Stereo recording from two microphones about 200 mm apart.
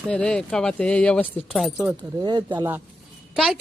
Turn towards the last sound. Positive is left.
turn(degrees=0)  # may be behind; listen again after turning